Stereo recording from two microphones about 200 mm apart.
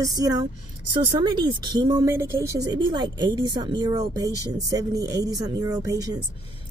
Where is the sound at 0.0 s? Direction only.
20° right (ahead or behind).